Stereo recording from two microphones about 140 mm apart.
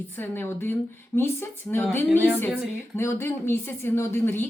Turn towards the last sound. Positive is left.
turn(degrees=15)  # may be behind; listen again after turning